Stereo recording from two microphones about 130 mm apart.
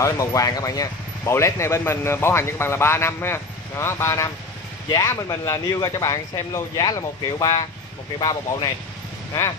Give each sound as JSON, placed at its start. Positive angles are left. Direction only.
{"t": 0.0, "sound": "speech", "side_deg": 25}